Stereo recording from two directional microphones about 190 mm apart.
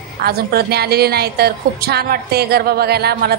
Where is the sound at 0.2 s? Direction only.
55° right (ahead or behind).